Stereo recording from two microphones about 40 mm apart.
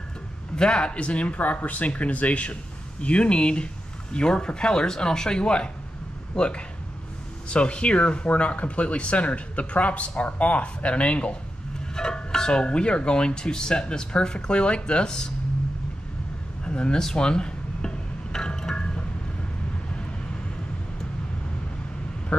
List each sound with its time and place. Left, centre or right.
0.6 s speech: left
11.9 s speech: centre
16.6 s speech: left
17.0 s music: left